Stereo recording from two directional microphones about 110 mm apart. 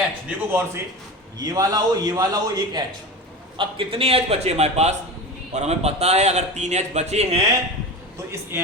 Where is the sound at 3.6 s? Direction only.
55° right (ahead or behind); by 7.4 s 75° right (ahead or behind).